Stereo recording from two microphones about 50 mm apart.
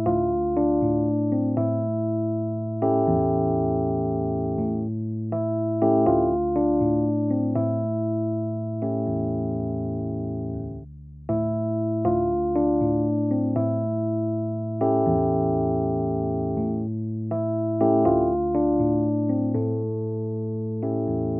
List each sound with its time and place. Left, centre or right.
0.0 s keyboard: centre
1.5 s electric piano: centre
2.8 s electric piano: centre
5.8 s electric piano: centre
12.0 s electric piano: centre
14.8 s electric piano: centre
17.7 s electric piano: centre